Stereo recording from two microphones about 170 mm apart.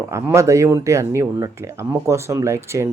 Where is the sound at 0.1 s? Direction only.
15° right (ahead or behind).